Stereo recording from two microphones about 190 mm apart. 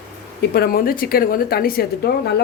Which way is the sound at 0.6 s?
50° left (ahead or behind).